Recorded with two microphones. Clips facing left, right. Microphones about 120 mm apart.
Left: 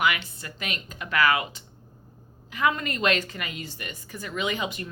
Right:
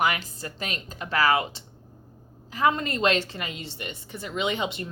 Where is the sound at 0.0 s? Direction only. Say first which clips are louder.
Even; 35° right (ahead or behind).